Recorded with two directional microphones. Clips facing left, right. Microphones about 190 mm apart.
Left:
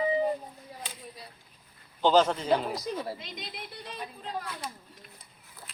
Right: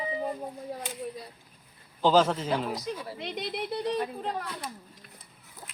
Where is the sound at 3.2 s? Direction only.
65° right (ahead or behind).